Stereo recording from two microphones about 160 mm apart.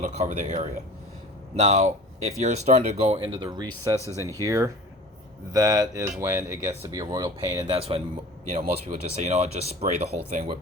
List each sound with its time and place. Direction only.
0.0 s speech: 50° right (ahead or behind); by 7.7 s 20° right (ahead or behind)
7.7 s speech: 35° right (ahead or behind)